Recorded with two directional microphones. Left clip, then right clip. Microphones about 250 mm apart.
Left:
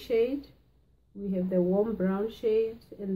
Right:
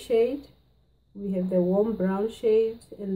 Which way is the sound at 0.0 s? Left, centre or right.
Centre.